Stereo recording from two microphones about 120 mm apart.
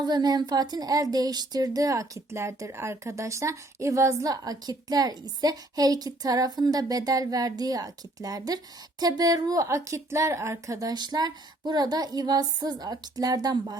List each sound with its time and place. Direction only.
0.0 s speech: 35° right (ahead or behind)